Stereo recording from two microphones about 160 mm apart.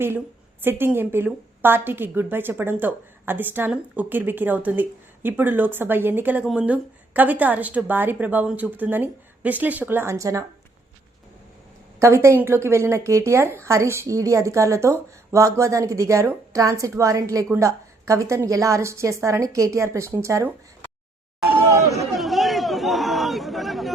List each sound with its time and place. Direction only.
0.6 s a woman's voice: 15° right (ahead or behind)
11.9 s a woman's voice: 15° right (ahead or behind)
21.7 s a woman's voice: 20° right (ahead or behind)
22.1 s chatter: centre (ahead or behind)